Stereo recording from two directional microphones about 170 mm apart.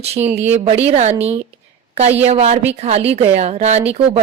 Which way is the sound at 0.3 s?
40° right (ahead or behind).